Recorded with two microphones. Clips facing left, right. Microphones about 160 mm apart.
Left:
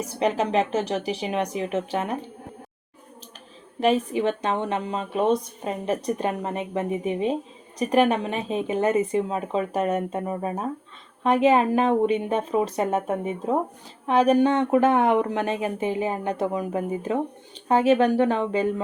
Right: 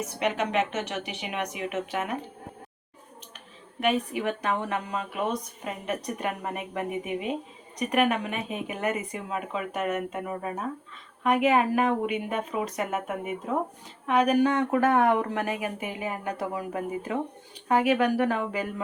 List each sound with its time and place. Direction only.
0.0 s speech: 35° left (ahead or behind)
3.8 s a woman's voice: 30° left (ahead or behind)